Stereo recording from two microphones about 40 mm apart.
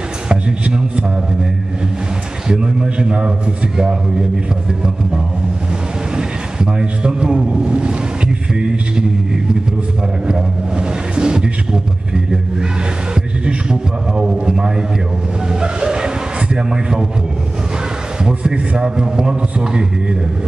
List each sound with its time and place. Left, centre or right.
0.3 s a man's voice: right
2.4 s a man's voice: centre
6.1 s a man's voice: centre
11.1 s music: right
13.1 s a sound: right
15.6 s vehicle: centre
18.2 s a man's voice: right